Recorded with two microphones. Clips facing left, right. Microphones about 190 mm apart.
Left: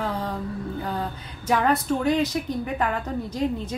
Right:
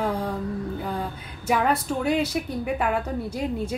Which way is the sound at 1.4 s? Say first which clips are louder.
Left 1 dB; 10° right (ahead or behind).